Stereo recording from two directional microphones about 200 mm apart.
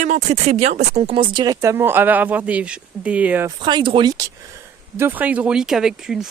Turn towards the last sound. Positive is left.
turn(degrees=0)  # may be behind; listen again after turning